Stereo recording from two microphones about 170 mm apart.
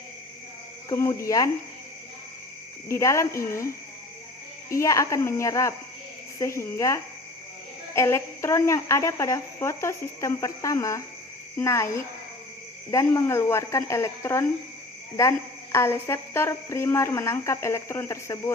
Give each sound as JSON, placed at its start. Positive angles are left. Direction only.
{"t": 0.9, "sound": "a woman's voice", "side_deg": 15}
{"t": 2.9, "sound": "a woman's voice", "side_deg": 15}
{"t": 4.7, "sound": "a woman's voice", "side_deg": 20}